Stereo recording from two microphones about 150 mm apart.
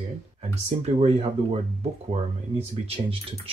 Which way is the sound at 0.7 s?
40° right (ahead or behind).